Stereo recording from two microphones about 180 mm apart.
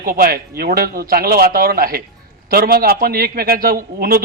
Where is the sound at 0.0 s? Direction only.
50° right (ahead or behind).